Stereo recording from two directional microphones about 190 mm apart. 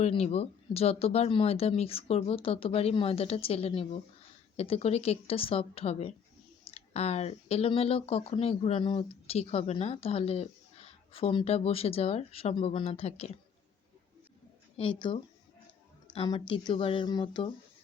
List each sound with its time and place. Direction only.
0.0 s speech: 30° left (ahead or behind)
14.8 s speech: 25° left (ahead or behind)